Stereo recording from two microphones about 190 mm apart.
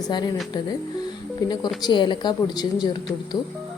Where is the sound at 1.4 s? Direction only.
20° left (ahead or behind).